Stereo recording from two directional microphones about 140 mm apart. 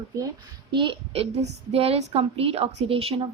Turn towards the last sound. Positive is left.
turn(degrees=-40)  # may be behind; listen again after turning